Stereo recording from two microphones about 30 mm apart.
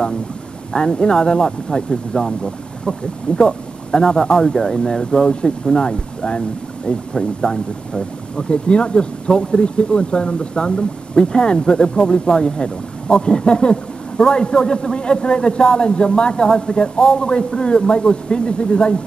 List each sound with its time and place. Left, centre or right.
0.7 s speech: left
7.4 s speech: left